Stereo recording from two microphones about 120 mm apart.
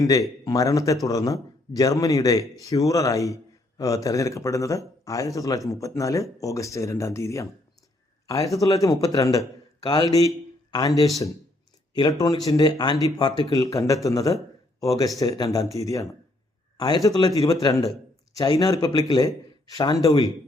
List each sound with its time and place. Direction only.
0.0 s a man's voice: 30° left (ahead or behind)
8.5 s a man's voice: 30° left (ahead or behind)
12.2 s a man's voice: 30° left (ahead or behind)